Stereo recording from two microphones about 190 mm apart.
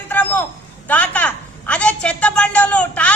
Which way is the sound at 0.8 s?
5° left (ahead or behind).